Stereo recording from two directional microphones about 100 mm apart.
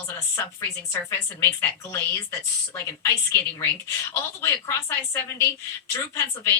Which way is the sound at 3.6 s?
30° left (ahead or behind).